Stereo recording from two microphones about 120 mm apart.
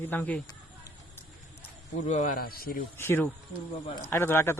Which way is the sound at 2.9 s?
20° left (ahead or behind).